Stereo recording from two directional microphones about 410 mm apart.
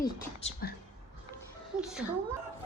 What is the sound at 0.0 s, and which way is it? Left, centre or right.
Speech, left.